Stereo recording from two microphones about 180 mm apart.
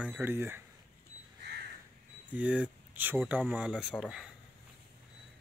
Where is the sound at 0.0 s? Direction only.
10° right (ahead or behind).